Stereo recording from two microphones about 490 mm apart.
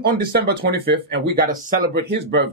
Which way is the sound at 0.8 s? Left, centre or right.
Centre.